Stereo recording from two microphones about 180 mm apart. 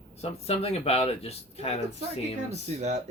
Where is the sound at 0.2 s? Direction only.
35° left (ahead or behind).